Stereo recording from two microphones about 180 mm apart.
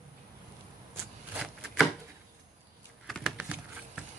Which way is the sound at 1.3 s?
Centre (ahead or behind).